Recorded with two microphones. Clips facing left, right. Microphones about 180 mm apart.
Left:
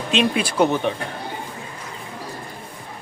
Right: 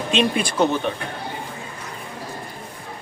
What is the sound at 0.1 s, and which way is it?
Speech, centre (ahead or behind).